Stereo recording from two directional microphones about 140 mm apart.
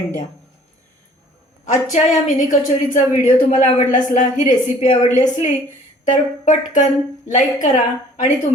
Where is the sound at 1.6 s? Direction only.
60° left (ahead or behind).